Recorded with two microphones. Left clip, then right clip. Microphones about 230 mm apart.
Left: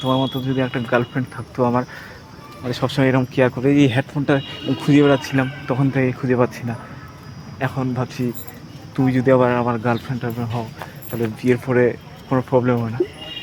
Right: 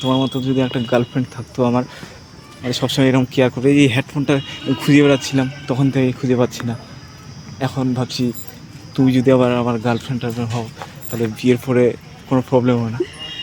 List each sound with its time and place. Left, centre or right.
0.0 s speech: right